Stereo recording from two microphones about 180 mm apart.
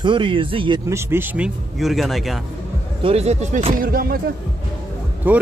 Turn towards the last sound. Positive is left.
turn(degrees=-10)  # may be behind; listen again after turning